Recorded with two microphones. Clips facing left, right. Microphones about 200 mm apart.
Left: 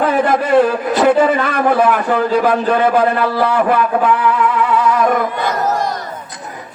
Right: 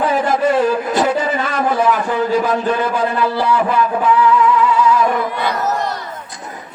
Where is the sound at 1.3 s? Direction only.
55° left (ahead or behind).